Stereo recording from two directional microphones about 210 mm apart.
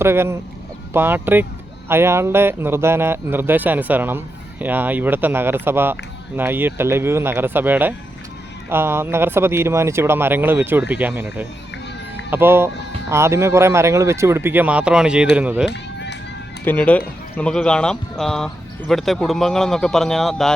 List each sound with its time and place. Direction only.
0.0 s speech: 10° right (ahead or behind)
15.7 s music: 55° left (ahead or behind)
16.6 s speech: 5° left (ahead or behind)